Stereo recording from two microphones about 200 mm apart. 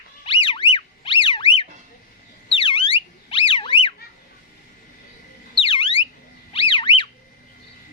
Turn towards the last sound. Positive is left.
turn(degrees=25)  # may be behind; listen again after turning